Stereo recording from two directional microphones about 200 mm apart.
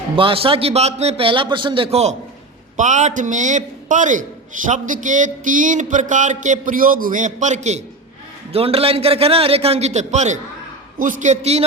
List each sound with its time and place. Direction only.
0.2 s a man's voice: 25° right (ahead or behind)